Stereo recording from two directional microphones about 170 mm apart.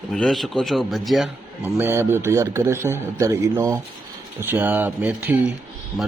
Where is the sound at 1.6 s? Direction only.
10° right (ahead or behind).